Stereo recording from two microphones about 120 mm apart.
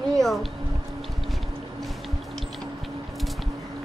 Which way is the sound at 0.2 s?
Centre (ahead or behind).